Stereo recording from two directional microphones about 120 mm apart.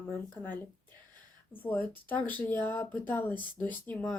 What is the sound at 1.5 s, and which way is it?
Speech, 15° left (ahead or behind).